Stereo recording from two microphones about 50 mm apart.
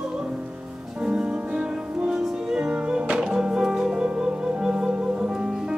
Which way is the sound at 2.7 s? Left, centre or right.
Right.